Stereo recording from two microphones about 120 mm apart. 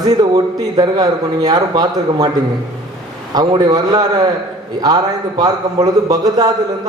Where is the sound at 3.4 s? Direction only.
35° right (ahead or behind).